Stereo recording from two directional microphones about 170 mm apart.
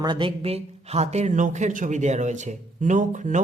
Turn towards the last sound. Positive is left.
turn(degrees=-45)  # may be behind; listen again after turning